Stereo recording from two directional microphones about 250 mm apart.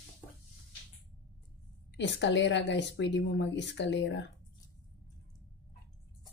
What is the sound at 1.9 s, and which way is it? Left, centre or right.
A woman's voice, left.